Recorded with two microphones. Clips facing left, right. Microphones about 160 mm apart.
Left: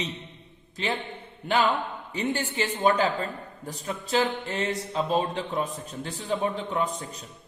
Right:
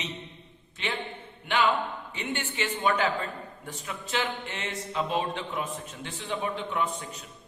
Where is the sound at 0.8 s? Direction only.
35° left (ahead or behind).